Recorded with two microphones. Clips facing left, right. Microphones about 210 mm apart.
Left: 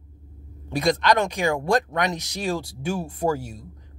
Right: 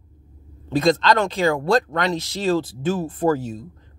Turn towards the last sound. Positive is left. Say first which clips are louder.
# right 4 dB
turn(degrees=10)  # may be behind; listen again after turning